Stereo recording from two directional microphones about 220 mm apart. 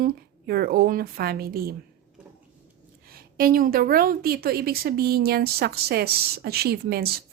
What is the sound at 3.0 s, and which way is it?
A woman's voice, 40° right (ahead or behind).